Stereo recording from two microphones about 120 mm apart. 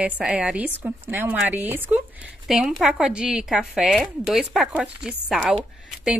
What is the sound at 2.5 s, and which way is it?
Speech, 5° right (ahead or behind).